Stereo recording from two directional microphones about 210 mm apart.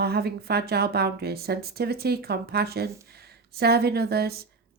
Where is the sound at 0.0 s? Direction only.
50° right (ahead or behind).